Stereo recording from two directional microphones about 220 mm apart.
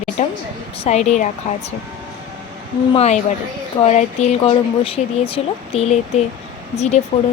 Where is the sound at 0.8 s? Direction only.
30° left (ahead or behind).